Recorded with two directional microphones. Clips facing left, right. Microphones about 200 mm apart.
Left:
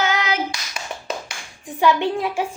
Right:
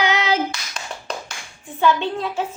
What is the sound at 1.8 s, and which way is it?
Child singing, 15° left (ahead or behind).